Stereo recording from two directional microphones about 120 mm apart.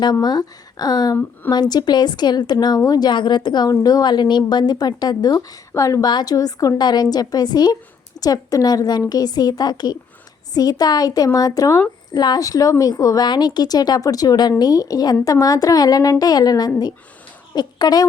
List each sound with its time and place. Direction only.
0.0 s a woman's voice: 35° left (ahead or behind)